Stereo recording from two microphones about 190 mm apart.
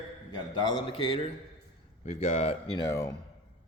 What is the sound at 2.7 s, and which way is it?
Speech, 20° left (ahead or behind).